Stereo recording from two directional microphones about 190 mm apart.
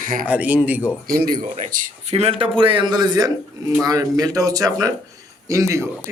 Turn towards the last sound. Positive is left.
turn(degrees=-15)  # may be behind; listen again after turning